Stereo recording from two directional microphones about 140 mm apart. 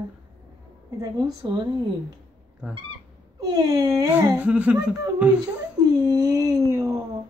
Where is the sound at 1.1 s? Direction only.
30° right (ahead or behind).